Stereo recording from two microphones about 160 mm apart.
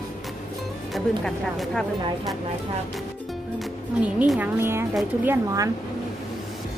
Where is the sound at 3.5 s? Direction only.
10° right (ahead or behind).